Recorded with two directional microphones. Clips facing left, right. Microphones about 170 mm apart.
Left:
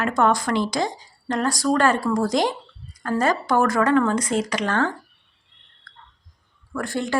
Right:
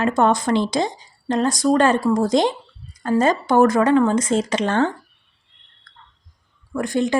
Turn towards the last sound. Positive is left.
turn(degrees=-20)  # may be behind; listen again after turning